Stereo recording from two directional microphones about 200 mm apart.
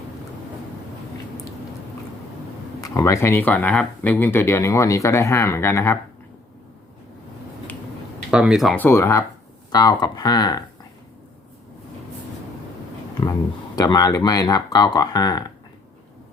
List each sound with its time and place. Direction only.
2.8 s speech: 15° left (ahead or behind)
8.3 s speech: 5° right (ahead or behind); by 10.6 s 20° left (ahead or behind)
13.7 s speech: 20° left (ahead or behind)